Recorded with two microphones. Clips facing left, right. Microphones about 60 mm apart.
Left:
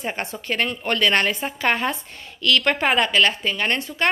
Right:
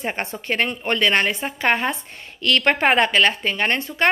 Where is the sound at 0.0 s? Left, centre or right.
Right.